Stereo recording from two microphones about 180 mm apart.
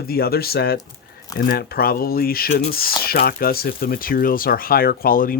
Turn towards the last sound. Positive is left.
turn(degrees=50)  # may be behind; listen again after turning